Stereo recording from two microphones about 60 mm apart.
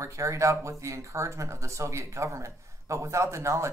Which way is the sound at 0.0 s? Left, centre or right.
Right.